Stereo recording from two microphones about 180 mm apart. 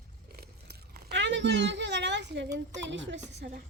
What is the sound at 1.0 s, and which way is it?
A woman's voice, 80° right.